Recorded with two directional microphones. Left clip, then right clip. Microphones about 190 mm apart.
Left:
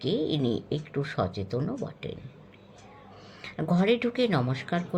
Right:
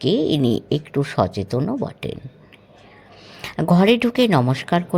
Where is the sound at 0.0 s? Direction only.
50° right (ahead or behind).